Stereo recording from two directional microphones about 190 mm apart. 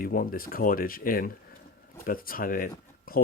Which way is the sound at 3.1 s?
50° left (ahead or behind).